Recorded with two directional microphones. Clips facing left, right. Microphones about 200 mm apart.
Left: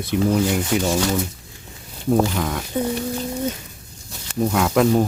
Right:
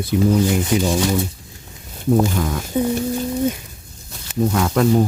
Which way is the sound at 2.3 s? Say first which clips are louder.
Right 2 dB; 5° right (ahead or behind).